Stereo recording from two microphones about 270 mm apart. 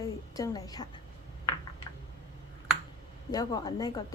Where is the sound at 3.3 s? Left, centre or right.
Centre.